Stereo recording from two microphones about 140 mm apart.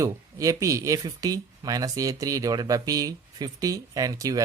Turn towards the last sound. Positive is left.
turn(degrees=-25)  # may be behind; listen again after turning